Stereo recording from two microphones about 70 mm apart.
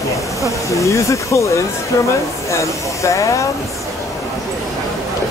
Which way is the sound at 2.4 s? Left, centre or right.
Left.